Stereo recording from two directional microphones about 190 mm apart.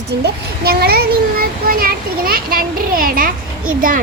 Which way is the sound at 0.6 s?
55° right (ahead or behind).